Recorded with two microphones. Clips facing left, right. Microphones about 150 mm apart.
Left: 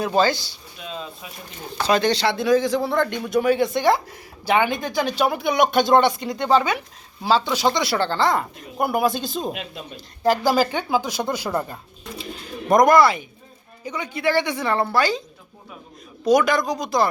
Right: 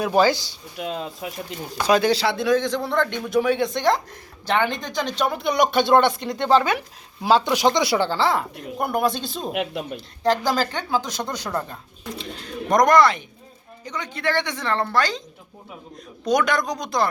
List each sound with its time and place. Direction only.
0.0 s speech: 15° right (ahead or behind)
0.8 s speech: 65° right (ahead or behind)
1.8 s speech: 10° right (ahead or behind)
7.5 s speech: 15° right (ahead or behind); by 9.6 s centre (ahead or behind)
9.6 s speech: 60° right (ahead or behind)
10.2 s speech: 10° left (ahead or behind)
16.2 s speech: centre (ahead or behind)